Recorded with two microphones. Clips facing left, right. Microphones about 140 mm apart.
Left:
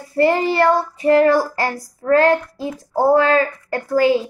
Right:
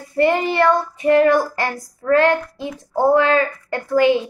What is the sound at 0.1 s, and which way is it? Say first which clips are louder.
A child's voice: left 1 dB; 30° left (ahead or behind).